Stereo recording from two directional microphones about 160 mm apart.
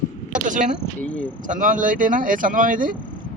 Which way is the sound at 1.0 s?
10° left (ahead or behind).